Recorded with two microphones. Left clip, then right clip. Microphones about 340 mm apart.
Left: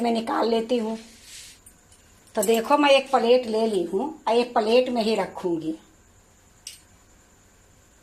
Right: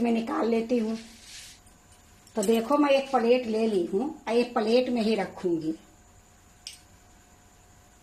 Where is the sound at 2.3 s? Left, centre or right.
Left.